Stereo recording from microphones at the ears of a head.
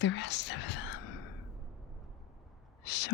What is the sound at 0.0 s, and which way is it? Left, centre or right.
Whispering, left.